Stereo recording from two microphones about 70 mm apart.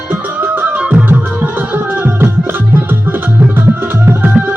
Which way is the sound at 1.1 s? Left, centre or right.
Right.